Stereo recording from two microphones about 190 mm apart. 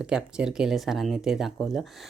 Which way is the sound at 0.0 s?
5° right (ahead or behind).